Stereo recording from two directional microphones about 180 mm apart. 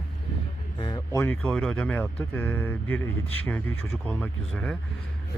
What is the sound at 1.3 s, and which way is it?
Speech, 5° left (ahead or behind).